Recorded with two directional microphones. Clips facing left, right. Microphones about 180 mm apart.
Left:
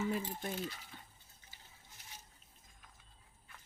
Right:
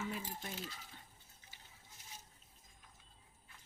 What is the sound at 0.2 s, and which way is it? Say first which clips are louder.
Speech: left 5 dB; 65° left (ahead or behind).